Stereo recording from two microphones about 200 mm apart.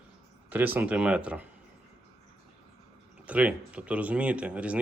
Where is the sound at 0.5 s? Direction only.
10° right (ahead or behind).